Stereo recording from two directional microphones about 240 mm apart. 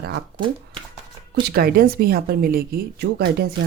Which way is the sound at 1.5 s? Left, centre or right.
Right.